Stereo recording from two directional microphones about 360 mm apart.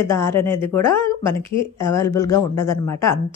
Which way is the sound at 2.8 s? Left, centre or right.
Left.